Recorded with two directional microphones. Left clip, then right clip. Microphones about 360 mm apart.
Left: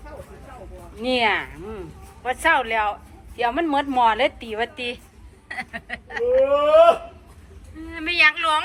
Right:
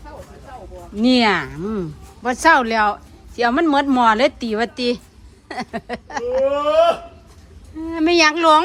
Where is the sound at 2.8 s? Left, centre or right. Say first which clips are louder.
Right 6 dB; right.